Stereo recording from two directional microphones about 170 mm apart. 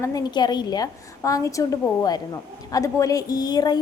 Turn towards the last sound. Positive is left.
turn(degrees=25)  # may be behind; listen again after turning